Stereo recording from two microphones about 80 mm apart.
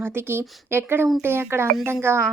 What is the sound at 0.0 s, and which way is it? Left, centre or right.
A woman's voice, right.